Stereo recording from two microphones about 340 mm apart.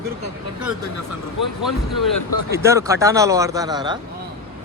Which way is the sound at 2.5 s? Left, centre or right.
Centre.